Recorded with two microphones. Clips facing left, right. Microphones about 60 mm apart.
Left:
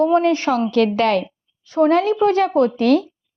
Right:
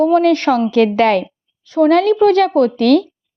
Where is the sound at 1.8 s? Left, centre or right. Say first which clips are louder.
Right 4 dB; right.